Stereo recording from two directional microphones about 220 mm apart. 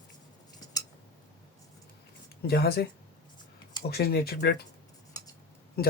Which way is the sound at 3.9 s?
45° left (ahead or behind).